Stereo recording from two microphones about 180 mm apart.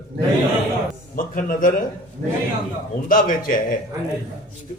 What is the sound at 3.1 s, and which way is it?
Speech, 50° left (ahead or behind).